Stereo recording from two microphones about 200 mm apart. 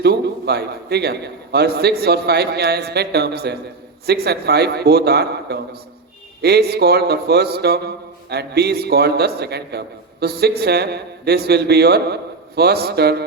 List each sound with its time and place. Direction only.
0.0 s a man's voice: 55° right (ahead or behind)